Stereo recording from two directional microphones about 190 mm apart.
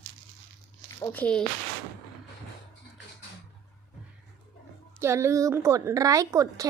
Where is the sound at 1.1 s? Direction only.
5° left (ahead or behind).